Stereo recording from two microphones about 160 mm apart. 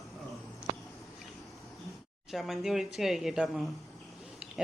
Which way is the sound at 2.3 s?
Centre (ahead or behind).